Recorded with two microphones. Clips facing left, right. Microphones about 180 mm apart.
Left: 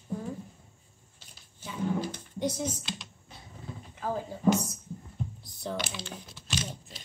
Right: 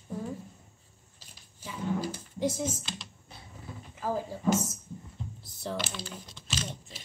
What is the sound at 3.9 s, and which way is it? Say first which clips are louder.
Speech: right 1 dB; 5° right (ahead or behind).